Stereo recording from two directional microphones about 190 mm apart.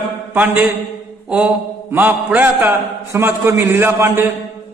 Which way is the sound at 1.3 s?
5° right (ahead or behind).